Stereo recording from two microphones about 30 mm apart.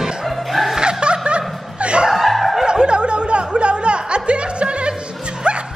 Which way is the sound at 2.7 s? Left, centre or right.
Right.